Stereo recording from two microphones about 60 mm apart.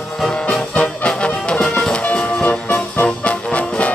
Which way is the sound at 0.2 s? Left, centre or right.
Centre.